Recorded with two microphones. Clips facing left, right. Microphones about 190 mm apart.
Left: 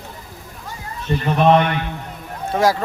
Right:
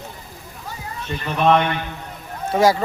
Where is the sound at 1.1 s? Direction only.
40° left (ahead or behind).